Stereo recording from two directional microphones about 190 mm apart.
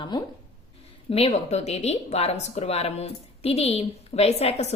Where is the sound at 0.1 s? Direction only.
20° left (ahead or behind).